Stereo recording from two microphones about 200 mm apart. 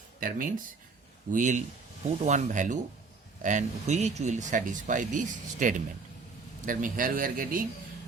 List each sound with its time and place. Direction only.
0.2 s speech: 45° right (ahead or behind)